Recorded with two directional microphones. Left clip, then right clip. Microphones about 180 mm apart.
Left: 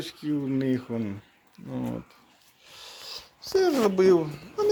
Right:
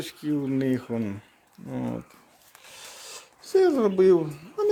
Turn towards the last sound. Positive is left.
turn(degrees=-5)  # may be behind; listen again after turning